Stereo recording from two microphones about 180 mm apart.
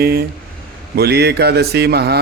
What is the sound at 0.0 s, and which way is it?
Mantra, 60° right (ahead or behind).